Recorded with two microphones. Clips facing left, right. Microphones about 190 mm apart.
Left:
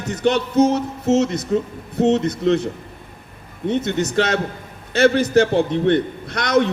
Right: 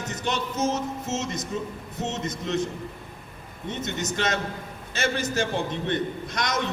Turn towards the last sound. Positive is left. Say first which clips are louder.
# left 10 dB
turn(degrees=65)  # may be behind; listen again after turning